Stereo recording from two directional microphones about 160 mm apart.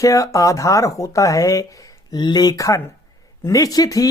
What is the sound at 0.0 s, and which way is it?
Speech, 20° left (ahead or behind).